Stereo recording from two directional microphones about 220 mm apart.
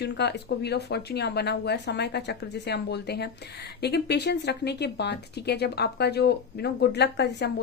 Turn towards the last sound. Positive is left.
turn(degrees=50)  # may be behind; listen again after turning